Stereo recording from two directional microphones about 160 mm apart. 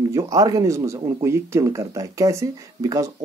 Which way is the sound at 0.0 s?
20° right (ahead or behind).